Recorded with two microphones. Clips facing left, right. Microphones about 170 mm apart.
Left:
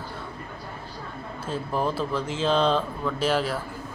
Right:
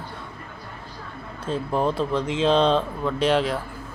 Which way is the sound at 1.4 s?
5° left (ahead or behind).